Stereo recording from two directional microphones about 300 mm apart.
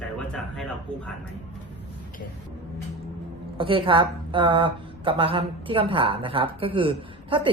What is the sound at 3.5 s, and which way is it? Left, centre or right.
A woman's voice, centre.